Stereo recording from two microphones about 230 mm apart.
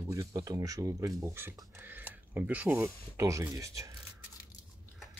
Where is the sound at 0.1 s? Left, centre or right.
Centre.